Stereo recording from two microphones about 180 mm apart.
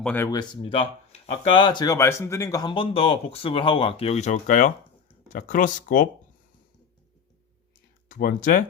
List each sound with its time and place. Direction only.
0.0 s speech: 10° left (ahead or behind)
0.3 s speech: 25° left (ahead or behind); by 6.1 s 45° left (ahead or behind)
8.0 s speech: 50° left (ahead or behind)